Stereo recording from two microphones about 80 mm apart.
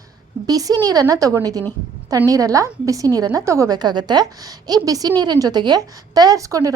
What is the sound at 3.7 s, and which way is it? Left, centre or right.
A woman's voice, right.